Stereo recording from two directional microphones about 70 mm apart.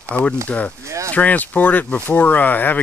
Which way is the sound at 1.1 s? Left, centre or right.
Left.